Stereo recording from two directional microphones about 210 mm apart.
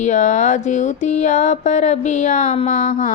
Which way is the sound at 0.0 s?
35° left (ahead or behind).